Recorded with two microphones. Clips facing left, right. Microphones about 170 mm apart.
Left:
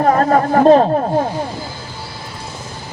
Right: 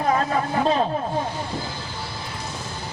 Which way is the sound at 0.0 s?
55° left (ahead or behind).